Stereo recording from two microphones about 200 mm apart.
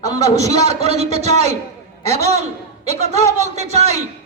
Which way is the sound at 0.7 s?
30° right (ahead or behind).